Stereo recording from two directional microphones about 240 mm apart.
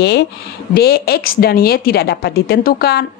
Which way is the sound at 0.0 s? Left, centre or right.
Left.